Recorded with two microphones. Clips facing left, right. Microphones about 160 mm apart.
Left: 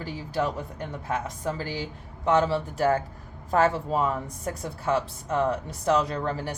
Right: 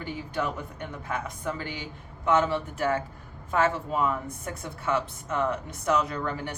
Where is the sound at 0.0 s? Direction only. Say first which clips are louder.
Left 2 dB; 35° left (ahead or behind).